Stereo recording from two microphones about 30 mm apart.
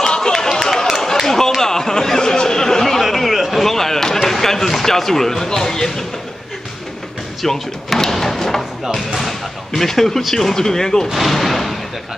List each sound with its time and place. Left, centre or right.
0.0 s run: left; by 1.0 s centre
1.2 s a sound: centre
2.3 s chatter: centre
2.8 s a sound: centre
3.6 s basketball bounce: centre
7.4 s speech: centre
8.9 s speech: centre
11.2 s speech: centre